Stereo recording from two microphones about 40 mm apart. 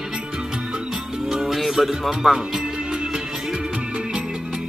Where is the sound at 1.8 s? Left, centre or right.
Centre.